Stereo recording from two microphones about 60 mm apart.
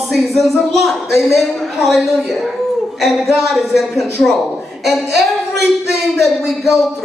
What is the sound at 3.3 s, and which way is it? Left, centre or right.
Speech, centre.